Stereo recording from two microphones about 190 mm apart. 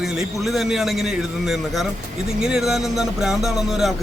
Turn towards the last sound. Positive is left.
turn(degrees=0)  # may be behind; listen again after turning